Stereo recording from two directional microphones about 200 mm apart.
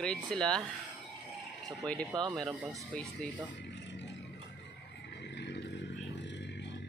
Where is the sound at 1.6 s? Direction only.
5° left (ahead or behind).